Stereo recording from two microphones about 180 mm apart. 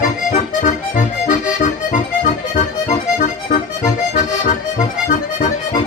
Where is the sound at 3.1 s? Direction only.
45° left (ahead or behind).